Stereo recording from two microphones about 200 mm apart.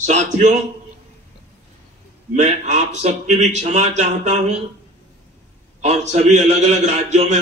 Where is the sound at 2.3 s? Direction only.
35° right (ahead or behind).